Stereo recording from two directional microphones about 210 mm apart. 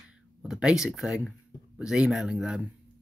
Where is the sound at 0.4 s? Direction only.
5° right (ahead or behind).